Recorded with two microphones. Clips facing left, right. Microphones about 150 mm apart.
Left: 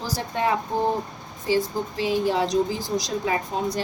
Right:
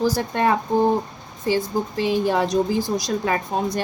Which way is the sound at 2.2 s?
55° right (ahead or behind).